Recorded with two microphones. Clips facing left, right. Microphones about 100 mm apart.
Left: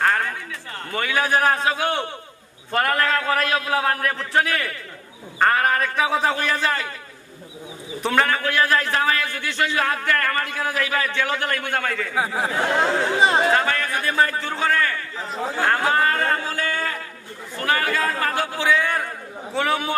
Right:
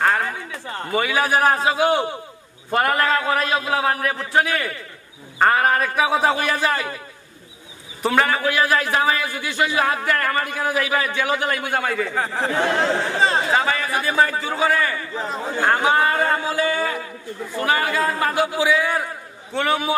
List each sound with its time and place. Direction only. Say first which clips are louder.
0.0 s a sound: right 1 dB; 10° right (ahead or behind)
0.7 s a sound: right 5 dB; 20° right (ahead or behind)
0.9 s a man's voice: right 2 dB; 5° right (ahead or behind)
8.0 s a man's voice: right 2 dB; 5° right (ahead or behind)
12.1 s speech: right 1 dB; 5° left (ahead or behind)
13.5 s a man's voice: even; 5° right (ahead or behind)